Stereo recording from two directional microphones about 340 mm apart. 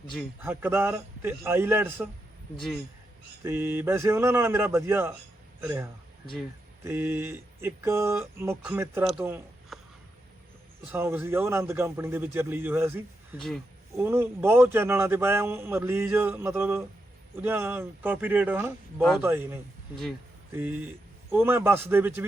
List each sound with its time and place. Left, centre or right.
0.1 s speech: centre
3.4 s speech: centre
10.9 s speech: centre